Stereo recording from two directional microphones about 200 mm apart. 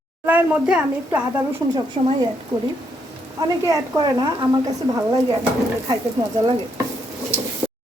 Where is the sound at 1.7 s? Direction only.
20° right (ahead or behind).